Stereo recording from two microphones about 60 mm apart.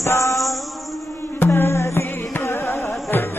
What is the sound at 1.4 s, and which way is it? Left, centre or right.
Music, left.